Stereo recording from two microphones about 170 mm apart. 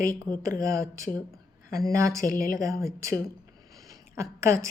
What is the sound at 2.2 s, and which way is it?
Speech, 55° left (ahead or behind).